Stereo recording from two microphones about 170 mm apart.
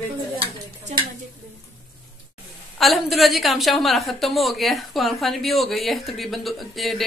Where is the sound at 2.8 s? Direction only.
Centre (ahead or behind).